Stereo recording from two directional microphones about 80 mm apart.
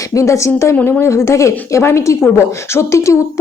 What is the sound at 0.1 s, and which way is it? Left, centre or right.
A woman's voice, left.